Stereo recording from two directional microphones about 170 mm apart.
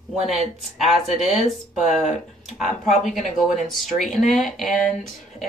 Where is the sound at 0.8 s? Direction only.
Centre (ahead or behind).